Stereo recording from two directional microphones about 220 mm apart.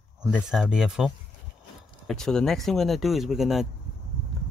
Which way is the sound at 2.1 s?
Centre (ahead or behind).